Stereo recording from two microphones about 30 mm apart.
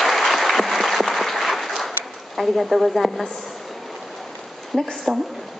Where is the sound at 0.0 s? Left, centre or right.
Centre.